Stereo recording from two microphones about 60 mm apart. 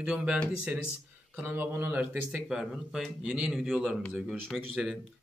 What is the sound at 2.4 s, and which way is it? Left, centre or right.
Speech, centre.